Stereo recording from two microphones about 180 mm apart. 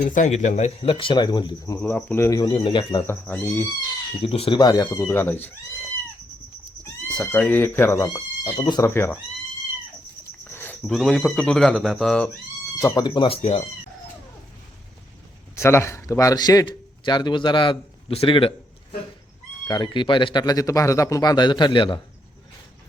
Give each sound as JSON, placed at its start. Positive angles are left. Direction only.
{"t": 0.0, "sound": "speech", "side_deg": 45}
{"t": 3.1, "sound": "speech", "side_deg": 10}
{"t": 4.2, "sound": "speech", "side_deg": 30}
{"t": 7.1, "sound": "speech", "side_deg": 5}
{"t": 10.5, "sound": "cricket", "side_deg": 10}
{"t": 10.8, "sound": "speech", "side_deg": 0}
{"t": 12.8, "sound": "speech", "side_deg": 20}
{"t": 15.5, "sound": "speech", "side_deg": 15}